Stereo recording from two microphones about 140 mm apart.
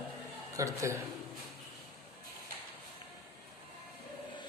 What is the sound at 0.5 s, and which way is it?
Speech, 20° right (ahead or behind).